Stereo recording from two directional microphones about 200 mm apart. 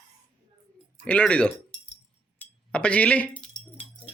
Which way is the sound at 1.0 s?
5° left (ahead or behind).